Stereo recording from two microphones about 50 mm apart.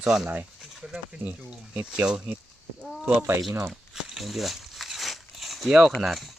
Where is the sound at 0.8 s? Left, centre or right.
Right.